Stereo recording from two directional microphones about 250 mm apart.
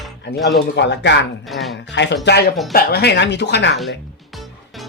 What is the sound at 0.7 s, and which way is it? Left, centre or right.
Speech, left.